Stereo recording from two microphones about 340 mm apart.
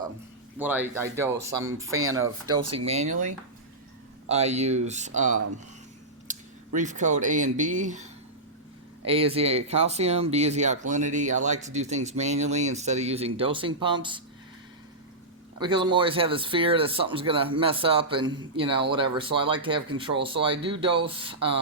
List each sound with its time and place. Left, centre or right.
0.6 s speech: centre
2.0 s speech: right
2.7 s speech: centre
6.7 s speech: right
9.0 s speech: centre
15.5 s speech: centre